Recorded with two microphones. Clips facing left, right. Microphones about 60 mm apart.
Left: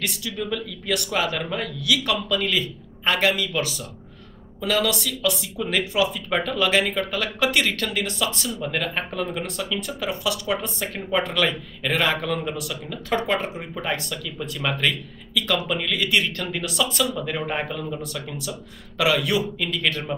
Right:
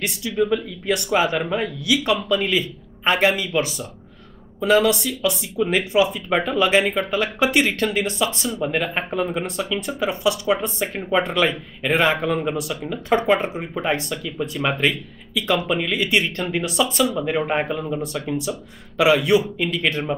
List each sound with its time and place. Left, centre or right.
0.6 s a man's voice: right